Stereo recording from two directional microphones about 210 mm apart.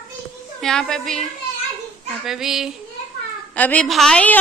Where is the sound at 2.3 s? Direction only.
Centre (ahead or behind).